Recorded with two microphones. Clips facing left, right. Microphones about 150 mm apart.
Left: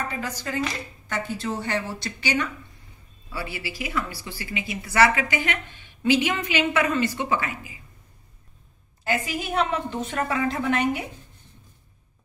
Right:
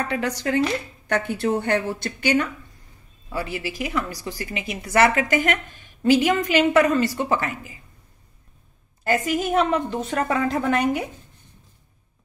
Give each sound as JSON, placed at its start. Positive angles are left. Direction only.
{"t": 0.1, "sound": "a woman's voice", "side_deg": -70}
{"t": 9.0, "sound": "a woman's voice", "side_deg": -45}